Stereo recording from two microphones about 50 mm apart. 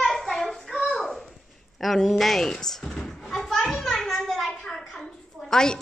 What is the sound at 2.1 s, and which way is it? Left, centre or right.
Speech, centre.